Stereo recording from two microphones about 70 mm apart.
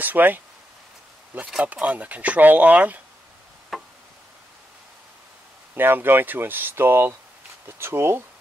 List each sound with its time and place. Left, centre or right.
0.0 s speech: right
3.7 s tick-tock: centre
5.8 s speech: right